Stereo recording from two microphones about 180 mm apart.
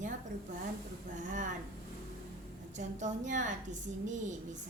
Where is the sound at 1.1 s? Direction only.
45° right (ahead or behind).